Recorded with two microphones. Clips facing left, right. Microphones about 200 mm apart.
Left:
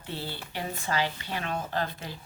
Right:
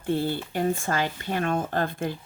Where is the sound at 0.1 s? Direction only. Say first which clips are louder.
Right 11 dB; 50° right (ahead or behind).